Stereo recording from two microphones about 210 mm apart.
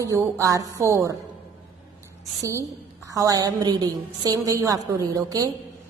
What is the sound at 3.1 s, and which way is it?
A woman's voice, 15° right (ahead or behind).